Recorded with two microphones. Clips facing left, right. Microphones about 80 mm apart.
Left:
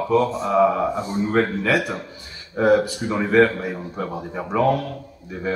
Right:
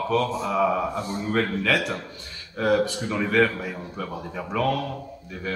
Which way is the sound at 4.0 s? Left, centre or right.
Left.